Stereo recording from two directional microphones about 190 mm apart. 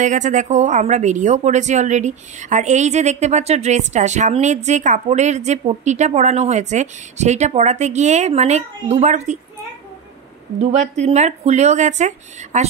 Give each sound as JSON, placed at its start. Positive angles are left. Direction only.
{"t": 0.0, "sound": "a woman's voice", "side_deg": -40}
{"t": 10.6, "sound": "a woman's voice", "side_deg": -35}